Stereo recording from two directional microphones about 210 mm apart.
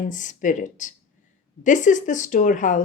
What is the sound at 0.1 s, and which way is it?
Speech, 35° left (ahead or behind).